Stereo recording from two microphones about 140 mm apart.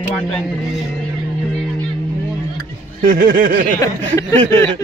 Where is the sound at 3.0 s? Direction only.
90° right.